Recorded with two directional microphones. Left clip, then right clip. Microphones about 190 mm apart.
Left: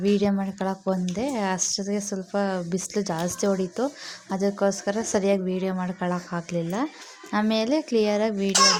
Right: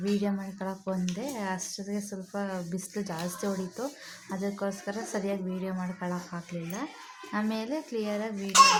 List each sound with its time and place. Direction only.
0.0 s speech: 30° left (ahead or behind)